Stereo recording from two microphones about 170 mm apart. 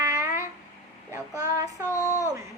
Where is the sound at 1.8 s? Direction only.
15° left (ahead or behind).